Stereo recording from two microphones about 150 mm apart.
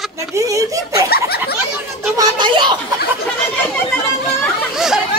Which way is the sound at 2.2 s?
30° right (ahead or behind).